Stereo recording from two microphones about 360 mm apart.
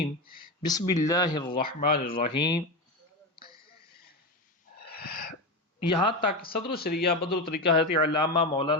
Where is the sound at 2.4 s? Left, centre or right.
Centre.